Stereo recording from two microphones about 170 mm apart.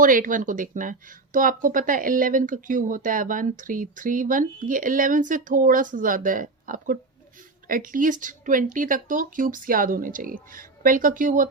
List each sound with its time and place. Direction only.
0.0 s speech: 55° right (ahead or behind)